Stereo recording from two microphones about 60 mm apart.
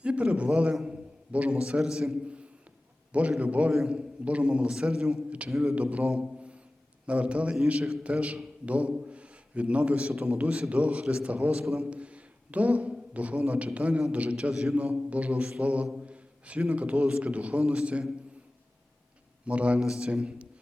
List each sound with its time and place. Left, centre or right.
0.0 s a man's voice: centre
0.9 s a sound: right
1.5 s a man's voice: centre
2.2 s a sound: centre
3.1 s a man's voice: right
5.5 s a man's voice: centre
5.7 s a man's voice: right
6.1 s a sound: centre
7.1 s a man's voice: right
14.5 s a man's voice: centre
19.5 s a man's voice: right